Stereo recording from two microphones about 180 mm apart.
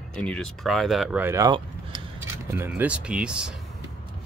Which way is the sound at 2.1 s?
10° right (ahead or behind).